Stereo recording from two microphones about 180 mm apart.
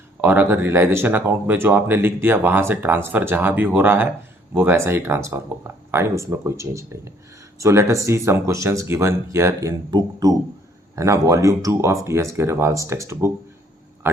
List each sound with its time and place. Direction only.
0.2 s speech: 10° right (ahead or behind)